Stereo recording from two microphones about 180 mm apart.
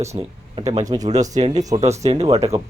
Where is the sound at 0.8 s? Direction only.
20° right (ahead or behind).